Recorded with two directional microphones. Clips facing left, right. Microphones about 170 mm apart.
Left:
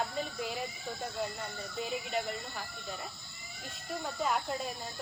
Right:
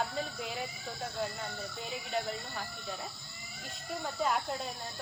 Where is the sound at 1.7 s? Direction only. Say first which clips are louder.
Left 3 dB; centre (ahead or behind).